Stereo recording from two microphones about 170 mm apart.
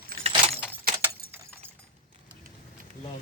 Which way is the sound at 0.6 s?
5° right (ahead or behind).